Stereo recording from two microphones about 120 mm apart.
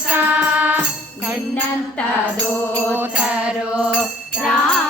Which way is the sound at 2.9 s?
15° right (ahead or behind).